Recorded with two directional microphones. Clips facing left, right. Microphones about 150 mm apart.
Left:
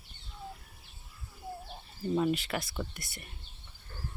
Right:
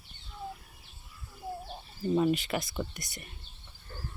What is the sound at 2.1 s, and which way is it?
Speech, 5° right (ahead or behind).